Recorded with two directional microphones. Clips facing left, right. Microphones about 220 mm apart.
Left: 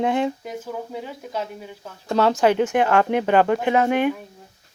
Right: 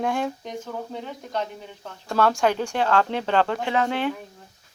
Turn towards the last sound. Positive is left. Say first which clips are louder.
# left 5 dB
turn(degrees=15)  # may be behind; listen again after turning